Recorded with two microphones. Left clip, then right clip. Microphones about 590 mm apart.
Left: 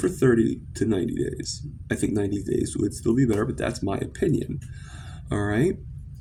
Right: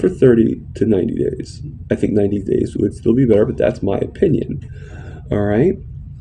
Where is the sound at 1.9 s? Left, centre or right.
Left.